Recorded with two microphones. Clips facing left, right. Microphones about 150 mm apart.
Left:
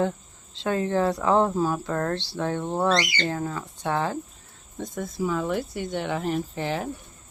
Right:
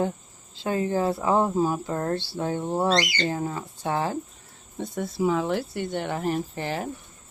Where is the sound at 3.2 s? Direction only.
20° right (ahead or behind).